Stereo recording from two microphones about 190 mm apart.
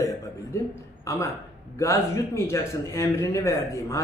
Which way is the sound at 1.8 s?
15° left (ahead or behind).